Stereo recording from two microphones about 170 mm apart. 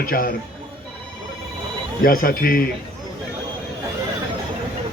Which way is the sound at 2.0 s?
55° left (ahead or behind).